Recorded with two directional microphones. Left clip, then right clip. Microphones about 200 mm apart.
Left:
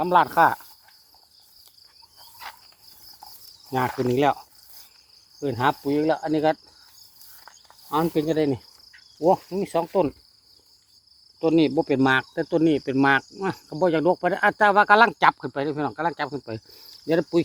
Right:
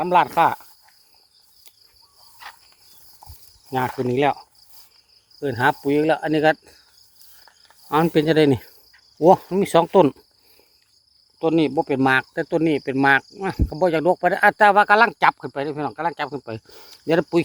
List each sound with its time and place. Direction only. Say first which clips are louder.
0.0 s speech: right 1 dB; 25° right (ahead or behind)
2.4 s cricket: even; 5° left (ahead or behind)
3.7 s speech: right 1 dB; 20° right (ahead or behind)
5.9 s cricket: right 4 dB; 45° right (ahead or behind)
7.9 s cricket: right 5 dB; 50° right (ahead or behind)
9.1 s speech: right 6 dB; 60° right (ahead or behind)
11.3 s speech: right 1 dB; 15° right (ahead or behind)
14.8 s speech: right 1 dB; 5° right (ahead or behind); by 17.4 s 30° right (ahead or behind)